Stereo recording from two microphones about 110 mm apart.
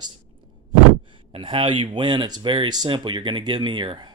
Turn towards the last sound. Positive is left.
turn(degrees=-45)  # may be behind; listen again after turning